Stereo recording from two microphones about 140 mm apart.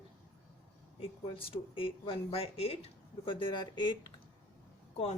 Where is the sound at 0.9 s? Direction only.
40° left (ahead or behind).